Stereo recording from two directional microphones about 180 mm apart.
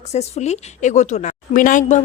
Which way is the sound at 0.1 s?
35° left (ahead or behind).